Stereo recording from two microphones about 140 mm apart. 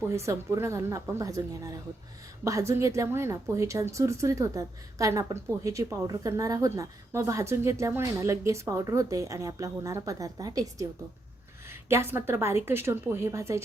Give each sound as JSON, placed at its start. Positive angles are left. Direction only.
{"t": 0.3, "sound": "a woman's voice", "side_deg": -20}
{"t": 2.4, "sound": "a woman's voice", "side_deg": -20}